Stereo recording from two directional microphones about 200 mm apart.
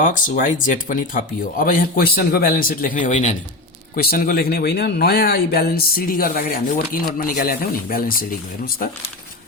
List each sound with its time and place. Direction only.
0.0 s a man's voice: 40° left (ahead or behind)
3.9 s a man's voice: 45° left (ahead or behind)